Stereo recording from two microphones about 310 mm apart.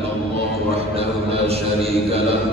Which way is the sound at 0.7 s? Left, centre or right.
Centre.